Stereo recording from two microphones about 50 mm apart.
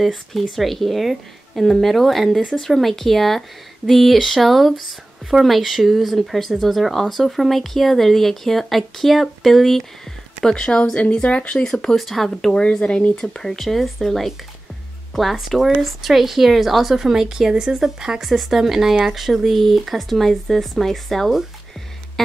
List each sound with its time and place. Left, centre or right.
0.0 s speech: centre
10.4 s speech: centre
11.7 s speech: centre
12.5 s speech: centre
13.4 s speech: centre